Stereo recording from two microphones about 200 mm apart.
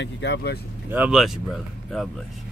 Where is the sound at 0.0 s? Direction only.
60° left (ahead or behind).